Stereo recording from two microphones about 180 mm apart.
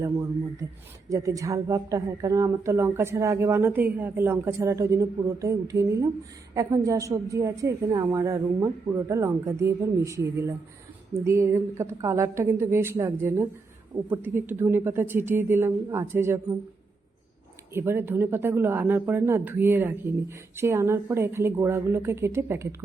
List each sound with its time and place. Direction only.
0.0 s a woman's voice: 15° right (ahead or behind)
17.7 s a woman's voice: 10° right (ahead or behind)